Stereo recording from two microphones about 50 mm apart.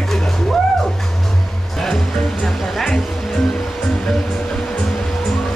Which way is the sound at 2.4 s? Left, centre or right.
Centre.